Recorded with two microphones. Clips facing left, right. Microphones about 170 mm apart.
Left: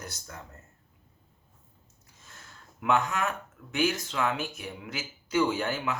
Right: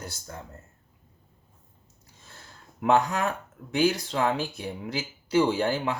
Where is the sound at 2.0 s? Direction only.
35° right (ahead or behind).